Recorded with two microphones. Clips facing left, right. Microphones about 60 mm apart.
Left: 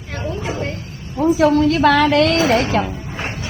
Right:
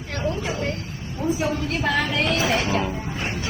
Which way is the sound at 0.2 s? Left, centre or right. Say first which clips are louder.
Left 2 dB; centre.